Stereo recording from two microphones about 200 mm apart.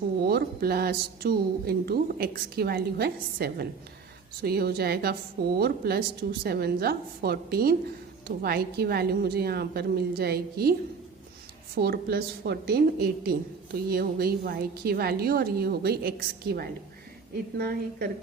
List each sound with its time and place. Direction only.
0.3 s a woman's voice: 50° right (ahead or behind)